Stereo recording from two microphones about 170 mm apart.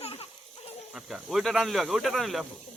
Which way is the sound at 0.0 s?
35° left (ahead or behind).